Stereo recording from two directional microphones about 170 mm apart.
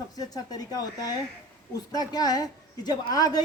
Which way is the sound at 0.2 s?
20° left (ahead or behind).